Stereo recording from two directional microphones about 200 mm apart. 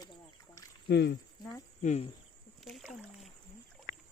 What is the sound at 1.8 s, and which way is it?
Speech, 35° left (ahead or behind).